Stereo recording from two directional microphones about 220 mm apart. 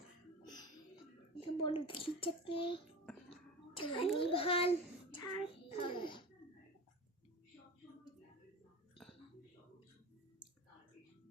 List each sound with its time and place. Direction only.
0.4 s music: 20° left (ahead or behind)
1.4 s a child's voice: 25° left (ahead or behind)
3.1 s music: 5° left (ahead or behind)
3.8 s a child's voice: 25° left (ahead or behind)
5.1 s a sound: 20° left (ahead or behind)